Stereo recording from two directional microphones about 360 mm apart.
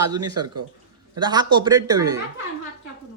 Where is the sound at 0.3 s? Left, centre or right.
Right.